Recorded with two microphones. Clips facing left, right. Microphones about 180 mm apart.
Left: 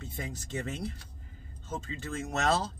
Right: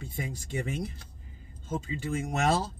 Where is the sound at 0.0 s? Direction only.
10° right (ahead or behind).